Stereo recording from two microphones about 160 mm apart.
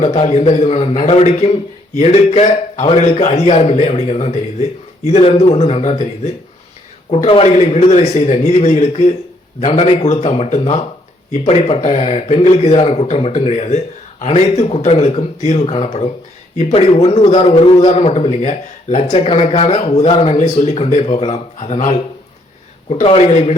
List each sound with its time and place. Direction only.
0.0 s a man's voice: 45° left (ahead or behind)